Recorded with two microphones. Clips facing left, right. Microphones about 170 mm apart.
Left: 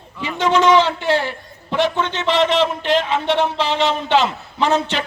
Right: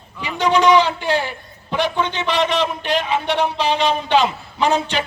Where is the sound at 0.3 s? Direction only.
25° left (ahead or behind).